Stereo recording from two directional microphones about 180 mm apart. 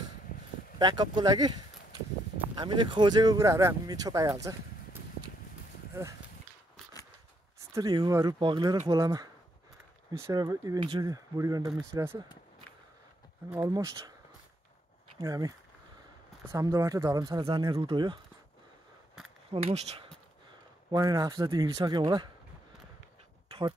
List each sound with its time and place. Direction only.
0.7 s speech: 25° right (ahead or behind)
7.7 s speech: 25° right (ahead or behind)
13.5 s speech: 20° right (ahead or behind)
15.1 s speech: 20° right (ahead or behind)
19.5 s speech: 35° right (ahead or behind)
20.9 s speech: 20° right (ahead or behind)